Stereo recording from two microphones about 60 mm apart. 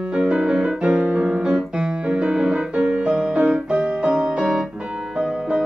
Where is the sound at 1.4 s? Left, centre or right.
Centre.